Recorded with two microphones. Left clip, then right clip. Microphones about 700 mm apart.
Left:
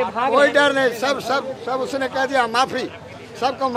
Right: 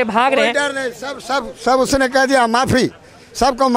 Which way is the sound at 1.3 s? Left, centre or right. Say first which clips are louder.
Right 6 dB; right.